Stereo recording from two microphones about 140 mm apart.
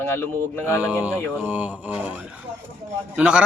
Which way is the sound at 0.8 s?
10° right (ahead or behind).